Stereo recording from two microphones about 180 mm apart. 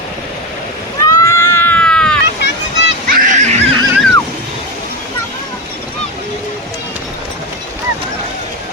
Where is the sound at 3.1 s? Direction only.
45° right (ahead or behind).